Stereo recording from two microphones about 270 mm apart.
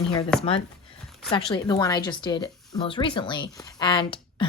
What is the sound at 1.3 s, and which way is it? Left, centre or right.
Speech, centre.